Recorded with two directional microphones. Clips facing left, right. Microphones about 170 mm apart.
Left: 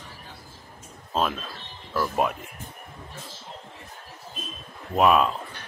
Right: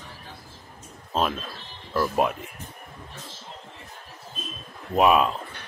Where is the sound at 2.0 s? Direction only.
5° right (ahead or behind).